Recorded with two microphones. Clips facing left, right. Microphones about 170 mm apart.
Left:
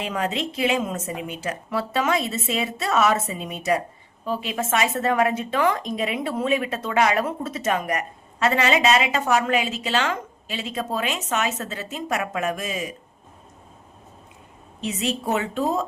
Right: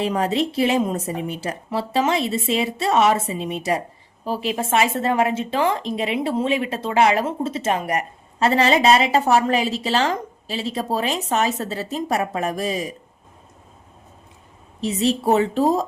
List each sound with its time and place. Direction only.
0.0 s speech: 35° right (ahead or behind)
14.8 s speech: 35° right (ahead or behind)